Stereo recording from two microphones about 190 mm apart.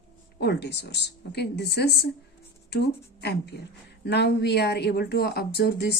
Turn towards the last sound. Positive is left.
turn(degrees=60)  # may be behind; listen again after turning